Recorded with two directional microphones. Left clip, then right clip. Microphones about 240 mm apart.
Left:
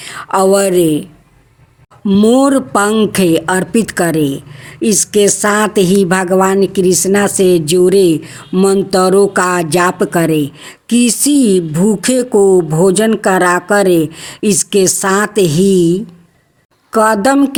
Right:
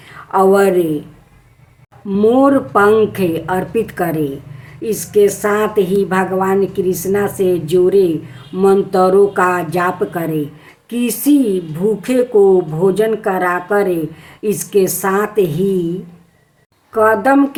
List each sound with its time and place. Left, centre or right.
0.0 s speech: left
2.0 s speech: left
16.9 s speech: left